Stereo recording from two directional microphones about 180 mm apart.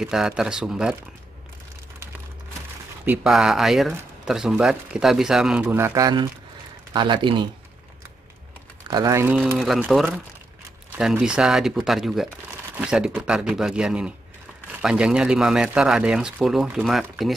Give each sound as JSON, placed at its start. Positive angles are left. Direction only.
{"t": 0.0, "sound": "a man's voice", "side_deg": -5}
{"t": 3.1, "sound": "a man's voice", "side_deg": -5}
{"t": 8.8, "sound": "a man's voice", "side_deg": -20}